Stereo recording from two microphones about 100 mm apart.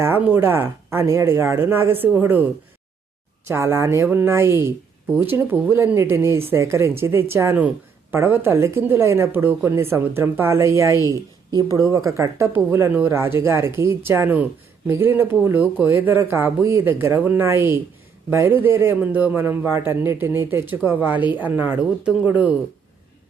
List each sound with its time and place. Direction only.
0.2 s a man's voice: 20° right (ahead or behind)